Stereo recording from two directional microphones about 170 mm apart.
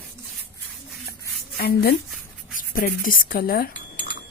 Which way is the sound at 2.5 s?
55° left (ahead or behind).